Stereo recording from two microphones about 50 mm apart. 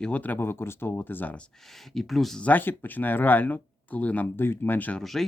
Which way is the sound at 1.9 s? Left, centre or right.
Centre.